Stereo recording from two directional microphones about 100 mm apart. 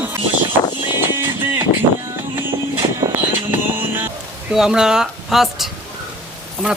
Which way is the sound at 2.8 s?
55° right (ahead or behind).